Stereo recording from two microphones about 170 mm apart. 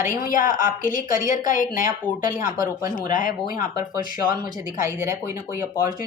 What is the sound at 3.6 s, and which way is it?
Speech, 55° left (ahead or behind).